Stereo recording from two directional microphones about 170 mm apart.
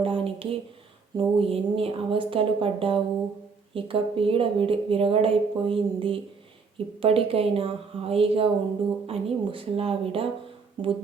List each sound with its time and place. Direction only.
0.0 s a woman's voice: 35° right (ahead or behind)